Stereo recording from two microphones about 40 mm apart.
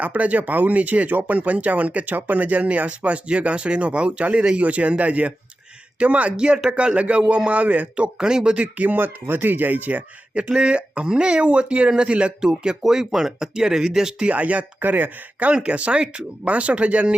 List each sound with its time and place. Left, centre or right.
0.0 s a man's voice: right; by 8.5 s centre
8.5 s speech: right
9.0 s speech: right
10.6 s a man's voice: right
12.8 s speech: centre
14.2 s speech: right
14.8 s speech: right
15.5 s a man's voice: right